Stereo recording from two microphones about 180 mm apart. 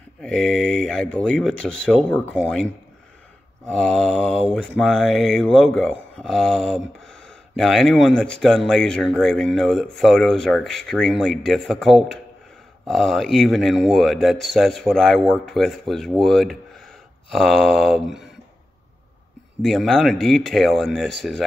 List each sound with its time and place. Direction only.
0.2 s speech: 5° left (ahead or behind)
3.7 s speech: 5° left (ahead or behind)
19.6 s speech: centre (ahead or behind)